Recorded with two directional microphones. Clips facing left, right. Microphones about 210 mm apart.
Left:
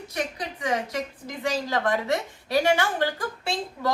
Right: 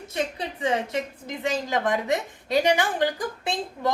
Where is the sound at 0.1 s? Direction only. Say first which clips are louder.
Right 3 dB; 25° right (ahead or behind).